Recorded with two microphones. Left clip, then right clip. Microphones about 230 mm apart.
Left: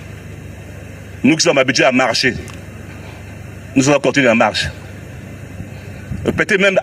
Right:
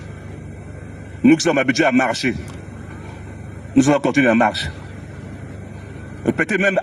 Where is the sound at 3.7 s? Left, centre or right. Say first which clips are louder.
Left 3 dB; left.